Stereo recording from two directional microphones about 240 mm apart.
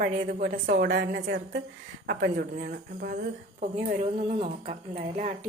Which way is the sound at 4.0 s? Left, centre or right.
Right.